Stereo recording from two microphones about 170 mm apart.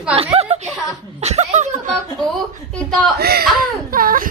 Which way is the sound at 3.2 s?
65° right (ahead or behind).